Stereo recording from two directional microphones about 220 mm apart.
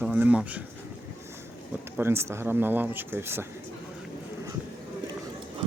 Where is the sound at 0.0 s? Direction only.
5° right (ahead or behind).